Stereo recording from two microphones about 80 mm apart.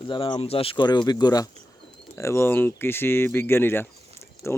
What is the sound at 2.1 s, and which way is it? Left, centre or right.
Speech, left.